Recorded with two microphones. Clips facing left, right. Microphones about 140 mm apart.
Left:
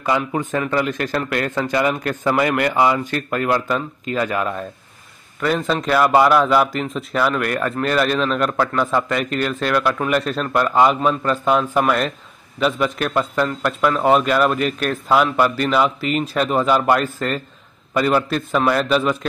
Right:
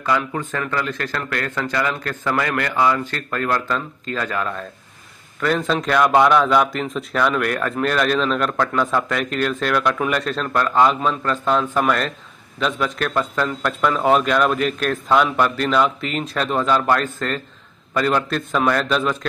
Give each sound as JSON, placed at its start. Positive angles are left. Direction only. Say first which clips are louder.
{"t": 0.0, "sound": "a man's voice", "louder": "left 2 dB", "side_deg": 15}